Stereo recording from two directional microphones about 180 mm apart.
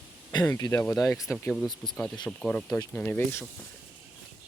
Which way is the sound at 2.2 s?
5° left (ahead or behind).